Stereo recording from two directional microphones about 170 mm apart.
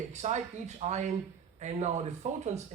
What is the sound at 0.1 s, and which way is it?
Speech, 45° right (ahead or behind).